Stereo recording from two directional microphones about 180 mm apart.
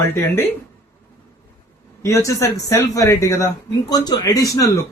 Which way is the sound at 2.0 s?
15° left (ahead or behind).